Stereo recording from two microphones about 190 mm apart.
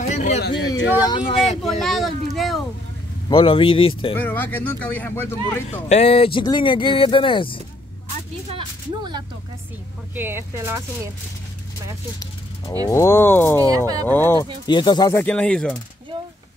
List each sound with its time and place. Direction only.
0.1 s a sound: 40° left (ahead or behind)
0.4 s speech: 60° left (ahead or behind)
1.0 s speech: 25° left (ahead or behind)
1.6 s a sound: centre (ahead or behind)
3.3 s speech: 25° left (ahead or behind)
4.2 s speech: 10° left (ahead or behind)
5.7 s speech: 35° left (ahead or behind)
8.5 s speech: 25° right (ahead or behind)
10.1 s speech: 10° right (ahead or behind)
12.8 s speech: 15° left (ahead or behind)
13.7 s speech: 20° right (ahead or behind)
14.0 s speech: 10° left (ahead or behind)
14.7 s speech: 25° left (ahead or behind)
15.2 s speech: 5° left (ahead or behind)